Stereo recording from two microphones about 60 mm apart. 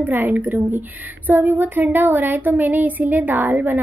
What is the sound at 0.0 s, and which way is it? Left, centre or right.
A woman's voice, right.